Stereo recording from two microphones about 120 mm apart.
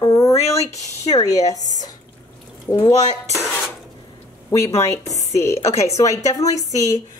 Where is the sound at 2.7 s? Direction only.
20° left (ahead or behind).